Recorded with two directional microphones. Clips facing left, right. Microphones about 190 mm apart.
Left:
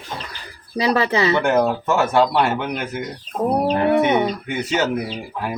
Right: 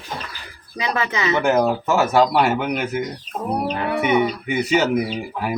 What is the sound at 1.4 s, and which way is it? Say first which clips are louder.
Speech: even; 5° right (ahead or behind).